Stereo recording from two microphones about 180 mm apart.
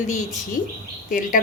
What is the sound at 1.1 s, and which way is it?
Speech, 50° left (ahead or behind).